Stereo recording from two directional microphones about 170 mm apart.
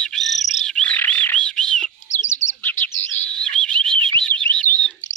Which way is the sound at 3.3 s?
5° left (ahead or behind).